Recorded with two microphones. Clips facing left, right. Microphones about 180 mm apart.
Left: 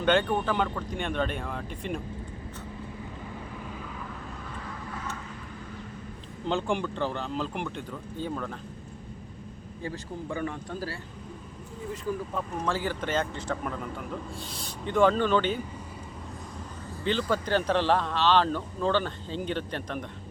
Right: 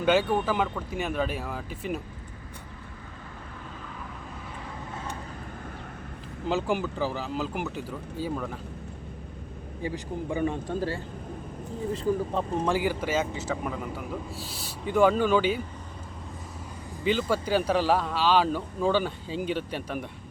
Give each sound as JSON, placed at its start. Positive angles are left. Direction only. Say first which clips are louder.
{"t": 0.0, "sound": "speech", "louder": "right 1 dB", "side_deg": -5}
{"t": 6.5, "sound": "speech", "louder": "right 1 dB", "side_deg": -5}
{"t": 9.8, "sound": "a man's voice", "louder": "right 3 dB", "side_deg": -15}
{"t": 12.3, "sound": "a man's voice", "louder": "right 5 dB", "side_deg": -30}
{"t": 12.6, "sound": "speech", "louder": "right 1 dB", "side_deg": -15}
{"t": 17.0, "sound": "speech", "louder": "right 2 dB", "side_deg": -10}